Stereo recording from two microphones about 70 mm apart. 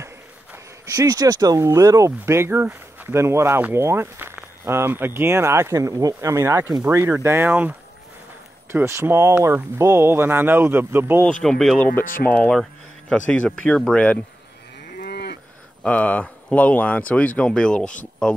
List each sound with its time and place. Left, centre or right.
0.9 s speech: right
1.6 s speech: right
8.8 s speech: right
11.4 s speech: centre
11.8 s speech: left
12.3 s speech: centre
15.8 s speech: centre